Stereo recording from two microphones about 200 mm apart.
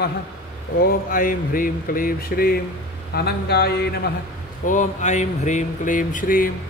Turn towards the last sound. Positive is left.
turn(degrees=45)  # may be behind; listen again after turning